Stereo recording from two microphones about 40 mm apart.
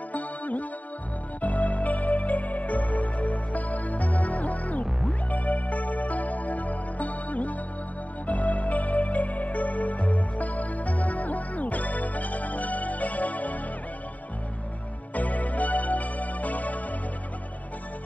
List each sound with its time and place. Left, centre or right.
0.1 s music: left
15.1 s music: left